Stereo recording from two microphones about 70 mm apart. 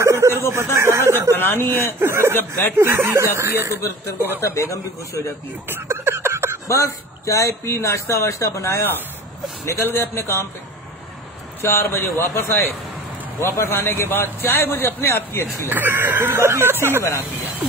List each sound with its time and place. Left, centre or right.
0.0 s a sound: right
1.3 s speech: left
2.0 s speech: right
4.4 s a man's voice: left
5.7 s a sound: right
6.7 s speech: left
9.8 s a man's voice: left
11.6 s a man's voice: left
15.7 s speech: right